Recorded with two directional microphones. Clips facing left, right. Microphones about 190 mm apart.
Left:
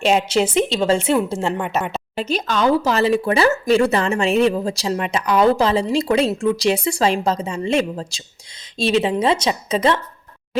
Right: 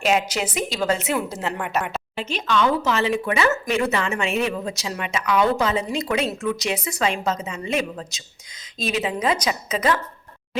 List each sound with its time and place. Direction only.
0.0 s a woman's voice: 30° left (ahead or behind)
2.1 s a woman's voice: 40° left (ahead or behind)